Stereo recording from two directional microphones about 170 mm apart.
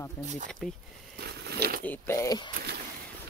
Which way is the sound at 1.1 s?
70° right (ahead or behind).